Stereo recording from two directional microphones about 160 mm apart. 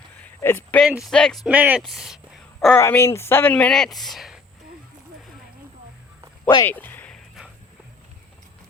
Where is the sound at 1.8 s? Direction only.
Centre (ahead or behind).